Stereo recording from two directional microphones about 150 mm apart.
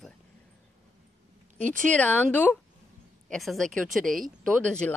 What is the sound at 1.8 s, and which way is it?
A woman's voice, 10° left (ahead or behind).